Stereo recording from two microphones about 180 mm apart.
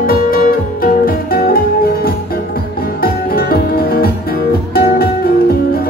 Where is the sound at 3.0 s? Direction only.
55° left (ahead or behind).